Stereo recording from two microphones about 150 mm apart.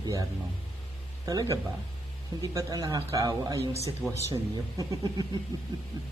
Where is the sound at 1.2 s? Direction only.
25° right (ahead or behind).